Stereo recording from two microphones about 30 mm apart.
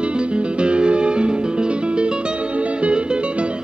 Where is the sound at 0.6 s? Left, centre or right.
Right.